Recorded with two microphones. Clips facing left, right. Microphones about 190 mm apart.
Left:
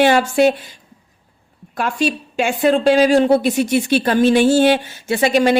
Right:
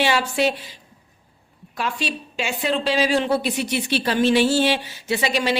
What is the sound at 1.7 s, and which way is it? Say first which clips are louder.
A woman's voice: left 7 dB; 50° left (ahead or behind).